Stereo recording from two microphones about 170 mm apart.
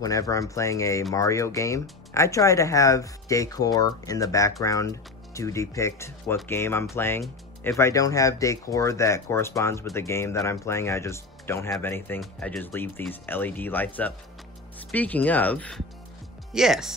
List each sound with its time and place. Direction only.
0.0 s speech: 20° left (ahead or behind)
16.5 s speech: centre (ahead or behind)